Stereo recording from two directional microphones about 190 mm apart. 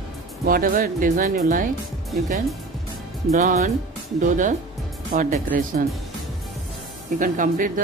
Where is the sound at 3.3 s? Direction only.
40° right (ahead or behind).